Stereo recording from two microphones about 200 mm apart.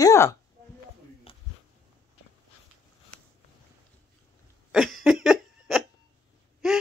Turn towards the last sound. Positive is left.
turn(degrees=0)  # may be behind; listen again after turning